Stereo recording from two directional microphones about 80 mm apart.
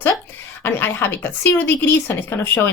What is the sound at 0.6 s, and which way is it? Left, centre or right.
A woman's voice, left.